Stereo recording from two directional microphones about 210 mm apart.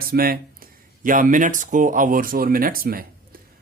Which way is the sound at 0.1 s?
45° right (ahead or behind).